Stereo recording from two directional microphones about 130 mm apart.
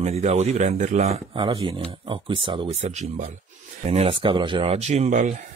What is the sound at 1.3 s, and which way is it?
Speech, 40° right (ahead or behind).